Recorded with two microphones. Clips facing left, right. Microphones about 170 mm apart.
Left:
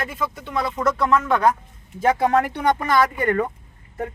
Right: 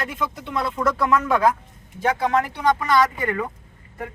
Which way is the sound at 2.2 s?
50° left (ahead or behind).